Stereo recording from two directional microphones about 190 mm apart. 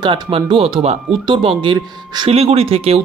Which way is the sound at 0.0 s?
25° right (ahead or behind).